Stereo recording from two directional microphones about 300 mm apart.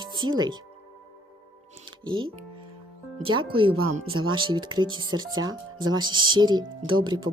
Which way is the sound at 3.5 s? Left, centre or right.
Centre.